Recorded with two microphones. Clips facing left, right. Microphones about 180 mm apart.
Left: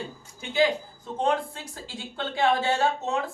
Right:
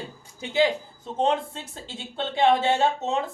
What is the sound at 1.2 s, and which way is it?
Speech, 25° right (ahead or behind).